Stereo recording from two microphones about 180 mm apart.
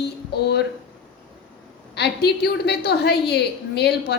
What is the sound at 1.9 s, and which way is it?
A woman's voice, 65° left (ahead or behind).